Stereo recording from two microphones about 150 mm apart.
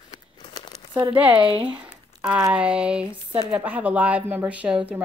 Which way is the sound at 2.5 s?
10° right (ahead or behind).